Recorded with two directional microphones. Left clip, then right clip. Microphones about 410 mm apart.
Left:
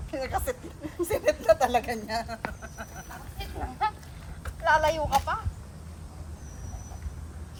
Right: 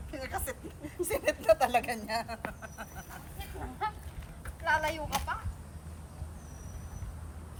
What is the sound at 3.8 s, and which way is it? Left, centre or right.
Goose, centre.